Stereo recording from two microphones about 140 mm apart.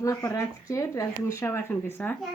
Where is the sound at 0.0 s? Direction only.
20° left (ahead or behind).